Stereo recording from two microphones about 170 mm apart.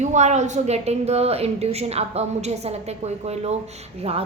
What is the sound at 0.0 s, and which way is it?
Speech, 45° right (ahead or behind).